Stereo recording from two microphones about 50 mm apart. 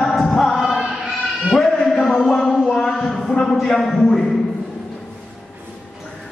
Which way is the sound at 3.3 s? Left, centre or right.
Centre.